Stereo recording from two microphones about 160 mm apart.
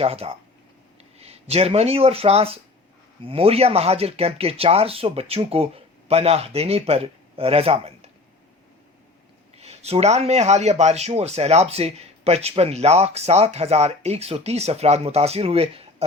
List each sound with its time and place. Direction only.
0.0 s speech: 35° right (ahead or behind)
9.6 s speech: 40° right (ahead or behind)